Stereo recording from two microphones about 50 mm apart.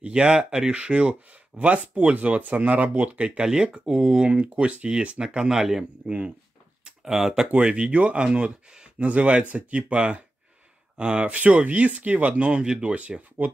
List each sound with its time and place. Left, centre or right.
0.0 s speech: centre
3.3 s speech: centre
4.3 s speech: right
6.8 s a sound: centre
7.5 s speech: right
8.9 s speech: right